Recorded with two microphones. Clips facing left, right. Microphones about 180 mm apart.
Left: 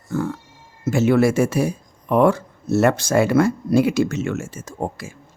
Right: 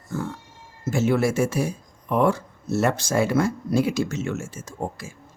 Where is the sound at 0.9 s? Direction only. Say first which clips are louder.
Left 5 dB; 70° left (ahead or behind).